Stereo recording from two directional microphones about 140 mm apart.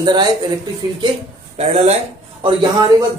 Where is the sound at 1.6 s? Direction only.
50° right (ahead or behind).